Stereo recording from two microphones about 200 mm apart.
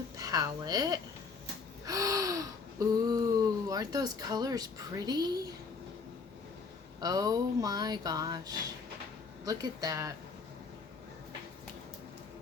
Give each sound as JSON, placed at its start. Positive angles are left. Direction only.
{"t": 0.2, "sound": "a woman's voice", "side_deg": -20}
{"t": 1.8, "sound": "gasp", "side_deg": -15}
{"t": 7.0, "sound": "speech", "side_deg": -20}